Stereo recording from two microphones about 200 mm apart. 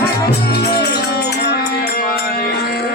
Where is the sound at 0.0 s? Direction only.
50° left (ahead or behind).